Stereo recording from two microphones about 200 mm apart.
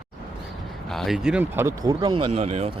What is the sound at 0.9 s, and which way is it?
Speech, centre (ahead or behind).